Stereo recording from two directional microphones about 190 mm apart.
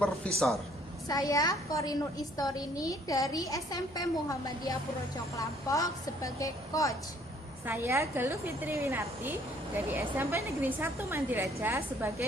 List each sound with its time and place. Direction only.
0.3 s speech: centre (ahead or behind)
1.0 s a woman's voice: 20° left (ahead or behind)
7.7 s a woman's voice: 15° right (ahead or behind)